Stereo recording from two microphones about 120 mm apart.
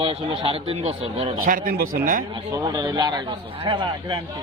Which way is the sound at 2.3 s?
35° right (ahead or behind).